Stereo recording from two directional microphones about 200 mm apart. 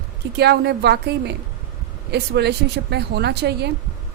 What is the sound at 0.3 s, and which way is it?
Speech, 55° right (ahead or behind).